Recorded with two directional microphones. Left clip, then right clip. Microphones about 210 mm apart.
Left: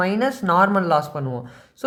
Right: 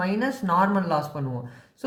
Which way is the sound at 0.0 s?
35° left (ahead or behind).